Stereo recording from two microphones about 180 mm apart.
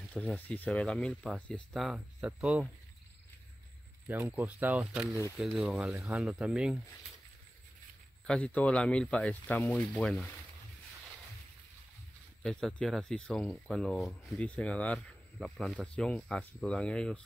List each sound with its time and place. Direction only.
0.1 s speech: 5° left (ahead or behind)
4.1 s speech: 10° right (ahead or behind)
8.3 s speech: 10° left (ahead or behind)
12.4 s speech: 5° left (ahead or behind)